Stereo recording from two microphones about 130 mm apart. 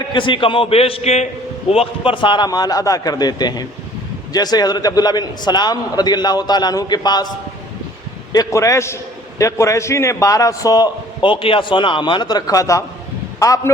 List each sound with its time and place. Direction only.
0.1 s a man's voice: 40° left (ahead or behind)
8.3 s a man's voice: 25° left (ahead or behind)